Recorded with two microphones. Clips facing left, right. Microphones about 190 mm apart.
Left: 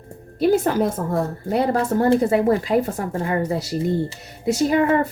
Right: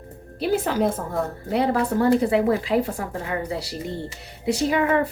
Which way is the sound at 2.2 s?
45° left (ahead or behind).